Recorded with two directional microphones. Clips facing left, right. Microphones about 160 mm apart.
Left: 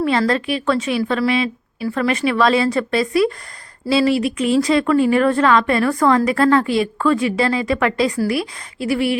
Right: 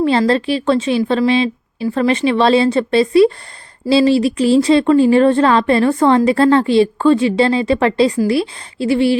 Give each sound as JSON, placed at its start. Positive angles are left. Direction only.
{"t": 0.0, "sound": "speech", "side_deg": -30}